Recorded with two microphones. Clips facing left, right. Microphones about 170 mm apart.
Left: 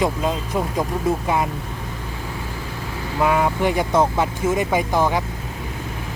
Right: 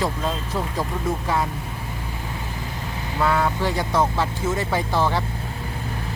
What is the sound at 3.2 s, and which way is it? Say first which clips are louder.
Speech: left 3 dB; 15° left (ahead or behind).